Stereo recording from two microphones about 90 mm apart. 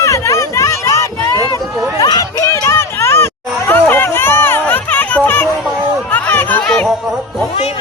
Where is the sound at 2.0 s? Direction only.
45° left (ahead or behind).